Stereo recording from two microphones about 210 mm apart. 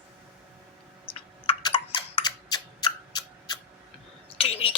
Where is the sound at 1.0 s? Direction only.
25° left (ahead or behind).